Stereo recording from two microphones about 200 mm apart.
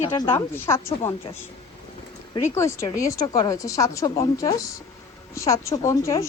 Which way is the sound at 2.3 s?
15° left (ahead or behind).